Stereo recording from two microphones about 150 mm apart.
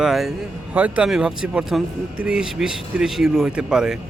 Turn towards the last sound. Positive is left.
turn(degrees=-5)  # may be behind; listen again after turning